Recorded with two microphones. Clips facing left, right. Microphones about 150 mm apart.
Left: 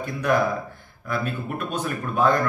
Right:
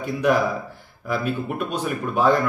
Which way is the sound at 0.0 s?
10° right (ahead or behind).